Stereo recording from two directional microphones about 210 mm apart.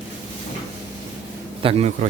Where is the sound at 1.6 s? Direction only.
30° right (ahead or behind).